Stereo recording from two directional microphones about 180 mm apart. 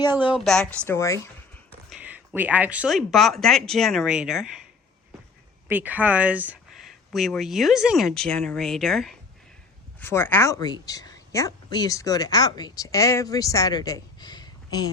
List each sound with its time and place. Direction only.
0.0 s speech: 10° right (ahead or behind)
0.3 s a woman's voice: centre (ahead or behind)
1.9 s speech: 10° right (ahead or behind)
5.6 s speech: 10° right (ahead or behind)
10.0 s a woman's voice: 10° left (ahead or behind)